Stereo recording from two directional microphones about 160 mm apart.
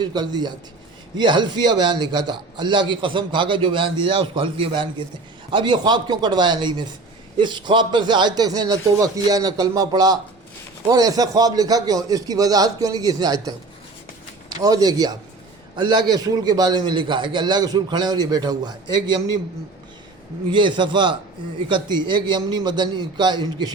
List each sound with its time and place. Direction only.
0.0 s a man's voice: 25° right (ahead or behind)
14.6 s a man's voice: 25° right (ahead or behind)
20.5 s a man's voice: 30° right (ahead or behind)